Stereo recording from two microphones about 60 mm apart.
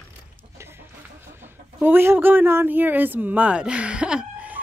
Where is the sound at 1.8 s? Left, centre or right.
Right; by 4.2 s centre.